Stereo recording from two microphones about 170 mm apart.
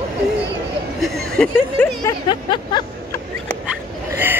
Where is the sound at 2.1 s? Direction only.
20° left (ahead or behind).